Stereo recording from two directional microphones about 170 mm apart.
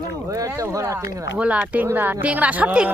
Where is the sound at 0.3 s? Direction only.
20° right (ahead or behind).